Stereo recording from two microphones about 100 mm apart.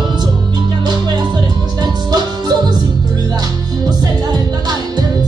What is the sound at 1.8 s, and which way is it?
Music, 45° right (ahead or behind).